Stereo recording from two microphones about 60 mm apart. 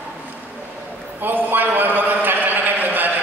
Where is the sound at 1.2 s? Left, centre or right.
Right.